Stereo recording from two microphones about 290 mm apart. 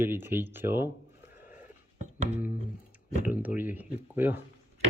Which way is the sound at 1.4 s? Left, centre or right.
Centre.